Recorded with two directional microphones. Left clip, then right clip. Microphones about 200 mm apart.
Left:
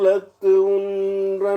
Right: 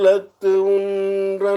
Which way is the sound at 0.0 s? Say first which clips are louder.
Right 2 dB; 30° right (ahead or behind).